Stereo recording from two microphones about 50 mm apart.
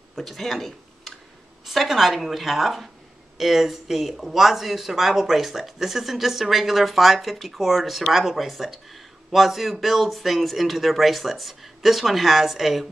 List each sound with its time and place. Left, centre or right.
0.2 s speech: centre